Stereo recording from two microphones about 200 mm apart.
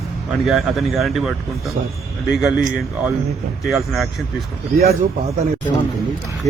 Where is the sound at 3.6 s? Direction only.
Centre (ahead or behind).